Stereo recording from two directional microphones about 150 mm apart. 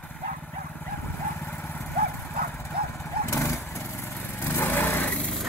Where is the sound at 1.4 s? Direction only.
15° left (ahead or behind).